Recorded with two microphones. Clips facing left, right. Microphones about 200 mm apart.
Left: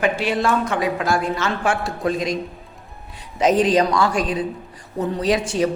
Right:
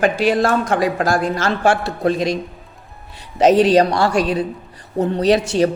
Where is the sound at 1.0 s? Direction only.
90° right.